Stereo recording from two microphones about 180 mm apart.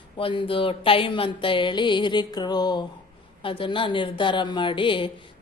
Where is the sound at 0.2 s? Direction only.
30° left (ahead or behind).